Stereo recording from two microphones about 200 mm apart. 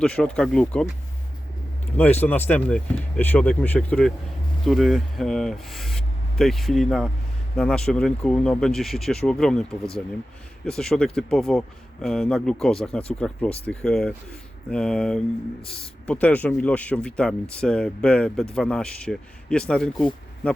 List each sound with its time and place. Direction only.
0.0 s speech: 5° left (ahead or behind)
2.2 s speech: 10° left (ahead or behind)
10.7 s speech: 5° left (ahead or behind)